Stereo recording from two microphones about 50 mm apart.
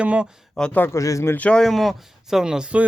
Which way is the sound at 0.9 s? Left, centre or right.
Left.